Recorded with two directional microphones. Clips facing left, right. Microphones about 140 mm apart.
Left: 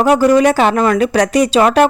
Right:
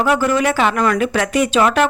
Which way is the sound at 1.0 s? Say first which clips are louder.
Left 4 dB; 35° left (ahead or behind).